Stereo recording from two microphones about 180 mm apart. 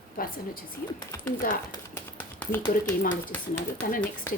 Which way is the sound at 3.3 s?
5° left (ahead or behind).